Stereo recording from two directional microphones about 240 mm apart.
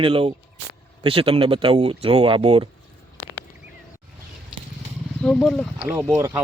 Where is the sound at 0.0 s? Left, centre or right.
Right.